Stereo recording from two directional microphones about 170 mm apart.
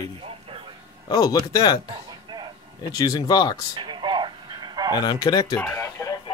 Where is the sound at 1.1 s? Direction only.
25° left (ahead or behind).